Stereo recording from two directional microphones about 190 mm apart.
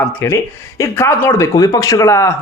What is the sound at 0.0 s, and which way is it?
A man's voice, 10° left (ahead or behind).